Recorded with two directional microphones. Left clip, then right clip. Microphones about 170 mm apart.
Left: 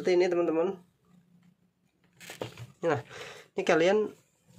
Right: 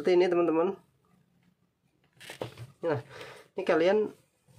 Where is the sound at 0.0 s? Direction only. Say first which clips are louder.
Right 1 dB; 15° right (ahead or behind).